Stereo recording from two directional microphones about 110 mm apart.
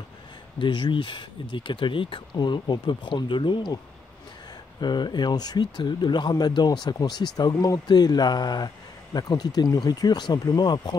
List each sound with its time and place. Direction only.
0.6 s speech: 45° left (ahead or behind)